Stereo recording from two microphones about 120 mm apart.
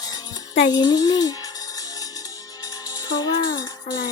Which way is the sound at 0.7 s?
30° left (ahead or behind).